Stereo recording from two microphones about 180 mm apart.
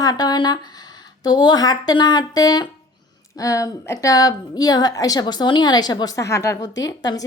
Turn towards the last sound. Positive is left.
turn(degrees=20)  # may be behind; listen again after turning